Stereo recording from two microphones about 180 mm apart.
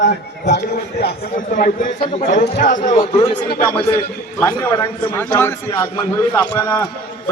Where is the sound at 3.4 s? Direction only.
55° left (ahead or behind).